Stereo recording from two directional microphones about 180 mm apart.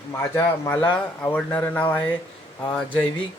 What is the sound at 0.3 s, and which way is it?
Speech, 15° left (ahead or behind).